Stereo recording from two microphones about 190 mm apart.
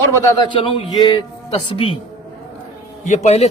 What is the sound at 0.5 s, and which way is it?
A man's voice, 25° left (ahead or behind).